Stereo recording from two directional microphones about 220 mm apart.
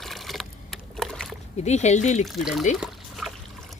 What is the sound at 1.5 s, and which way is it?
Speech, 30° left (ahead or behind).